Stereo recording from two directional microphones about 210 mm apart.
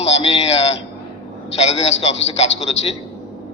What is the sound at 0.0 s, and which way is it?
A man's voice, 30° left (ahead or behind).